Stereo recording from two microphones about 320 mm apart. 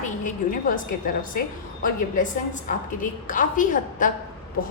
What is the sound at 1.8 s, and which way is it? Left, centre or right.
A woman's voice, left.